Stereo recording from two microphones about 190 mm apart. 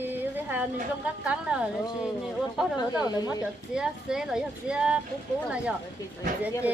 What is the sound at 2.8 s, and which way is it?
Speech, 20° left (ahead or behind).